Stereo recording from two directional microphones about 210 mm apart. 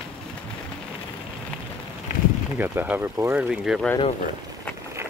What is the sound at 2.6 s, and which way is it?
Speech, 10° right (ahead or behind).